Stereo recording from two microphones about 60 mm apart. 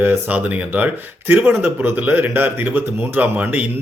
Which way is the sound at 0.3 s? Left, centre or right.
Right.